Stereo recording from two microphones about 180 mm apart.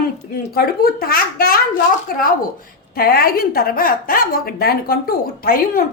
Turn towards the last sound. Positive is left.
turn(degrees=55)  # may be behind; listen again after turning